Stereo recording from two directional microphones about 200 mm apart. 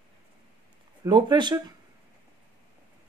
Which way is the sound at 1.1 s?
20° right (ahead or behind).